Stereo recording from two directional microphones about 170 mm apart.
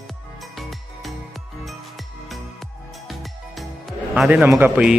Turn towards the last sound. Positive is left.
turn(degrees=-10)  # may be behind; listen again after turning